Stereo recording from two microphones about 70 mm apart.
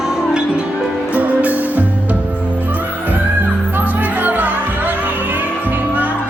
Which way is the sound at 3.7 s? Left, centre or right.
Right.